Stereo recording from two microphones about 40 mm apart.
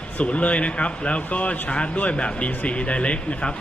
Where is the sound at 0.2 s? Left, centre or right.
Left.